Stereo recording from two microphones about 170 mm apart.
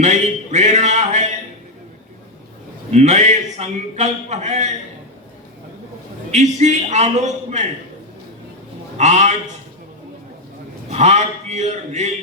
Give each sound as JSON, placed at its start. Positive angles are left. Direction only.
{"t": 0.0, "sound": "speech", "side_deg": -45}
{"t": 2.9, "sound": "a man's voice", "side_deg": -40}
{"t": 6.3, "sound": "a man's voice", "side_deg": -40}
{"t": 9.0, "sound": "a man's voice", "side_deg": -45}
{"t": 10.9, "sound": "a man's voice", "side_deg": -40}